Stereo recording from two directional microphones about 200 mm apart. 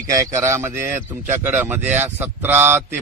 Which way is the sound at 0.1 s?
15° right (ahead or behind).